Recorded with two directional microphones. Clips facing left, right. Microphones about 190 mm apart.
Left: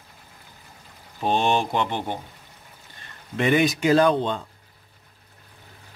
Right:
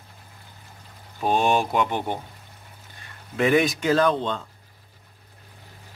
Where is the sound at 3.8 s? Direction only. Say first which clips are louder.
Left 2 dB; 15° left (ahead or behind).